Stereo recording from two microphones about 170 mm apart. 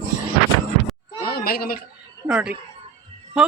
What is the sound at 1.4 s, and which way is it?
Speech, 60° left (ahead or behind).